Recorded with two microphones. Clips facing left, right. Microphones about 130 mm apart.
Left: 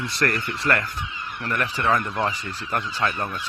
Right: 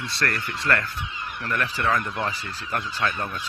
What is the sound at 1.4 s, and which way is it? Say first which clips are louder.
Speech: left 2 dB; 10° left (ahead or behind).